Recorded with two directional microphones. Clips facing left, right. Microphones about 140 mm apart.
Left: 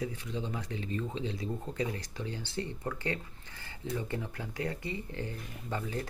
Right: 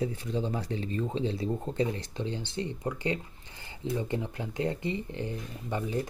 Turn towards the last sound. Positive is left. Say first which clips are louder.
# right 4 dB
turn(degrees=-20)  # may be behind; listen again after turning